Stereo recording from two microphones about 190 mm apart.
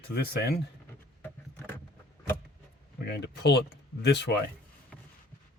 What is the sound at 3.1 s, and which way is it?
Speech, 60° left (ahead or behind).